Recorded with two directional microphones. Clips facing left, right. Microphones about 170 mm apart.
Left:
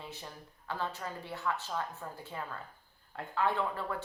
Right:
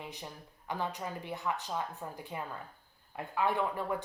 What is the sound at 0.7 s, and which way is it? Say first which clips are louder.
Speech: right 1 dB; 15° right (ahead or behind).